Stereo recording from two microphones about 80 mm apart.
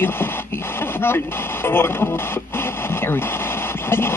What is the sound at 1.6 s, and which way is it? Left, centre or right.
Speech, left.